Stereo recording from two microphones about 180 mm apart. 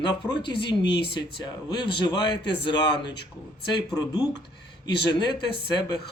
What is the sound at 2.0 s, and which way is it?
Speech, 25° left (ahead or behind).